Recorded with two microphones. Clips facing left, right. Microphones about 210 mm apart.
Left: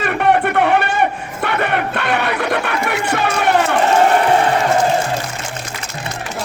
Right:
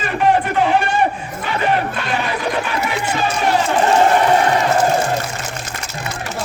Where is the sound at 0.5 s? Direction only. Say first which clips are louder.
Left 1 dB; 60° left (ahead or behind).